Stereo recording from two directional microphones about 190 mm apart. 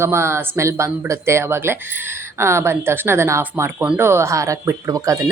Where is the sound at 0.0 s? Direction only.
15° right (ahead or behind).